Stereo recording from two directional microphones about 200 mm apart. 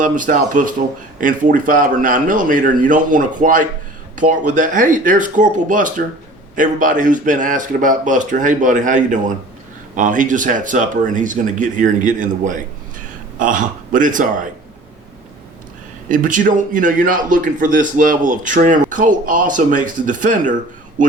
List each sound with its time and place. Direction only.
0.0 s a man's voice: 40° right (ahead or behind)
16.0 s a man's voice: 40° right (ahead or behind)